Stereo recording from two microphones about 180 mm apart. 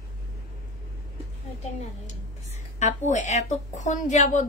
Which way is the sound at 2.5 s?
40° left (ahead or behind).